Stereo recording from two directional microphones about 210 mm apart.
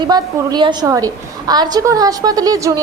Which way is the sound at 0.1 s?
20° right (ahead or behind).